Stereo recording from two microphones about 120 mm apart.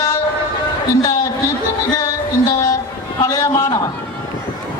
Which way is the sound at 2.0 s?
30° left (ahead or behind).